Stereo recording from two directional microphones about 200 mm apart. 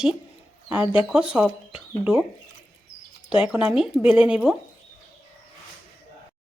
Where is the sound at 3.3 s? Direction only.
5° right (ahead or behind).